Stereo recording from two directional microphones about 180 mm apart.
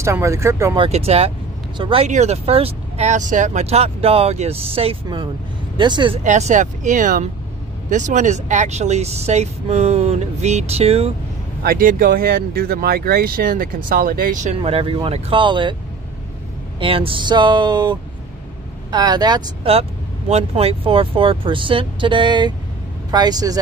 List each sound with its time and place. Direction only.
0.0 s speech: 15° right (ahead or behind)
0.7 s speech: 35° right (ahead or behind)
2.0 s speech: 40° right (ahead or behind)
6.2 s speech: 40° right (ahead or behind)
11.6 s speech: 55° right (ahead or behind)
14.6 s speech: 30° right (ahead or behind)
16.8 s speech: 30° right (ahead or behind)